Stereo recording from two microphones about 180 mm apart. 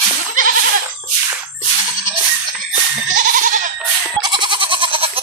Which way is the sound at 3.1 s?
45° right (ahead or behind).